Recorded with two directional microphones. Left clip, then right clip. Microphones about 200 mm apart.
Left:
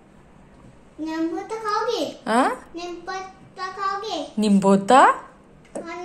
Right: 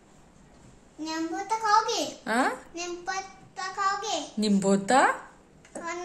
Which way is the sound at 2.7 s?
20° right (ahead or behind).